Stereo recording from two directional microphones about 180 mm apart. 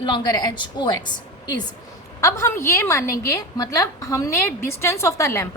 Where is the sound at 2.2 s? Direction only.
15° left (ahead or behind).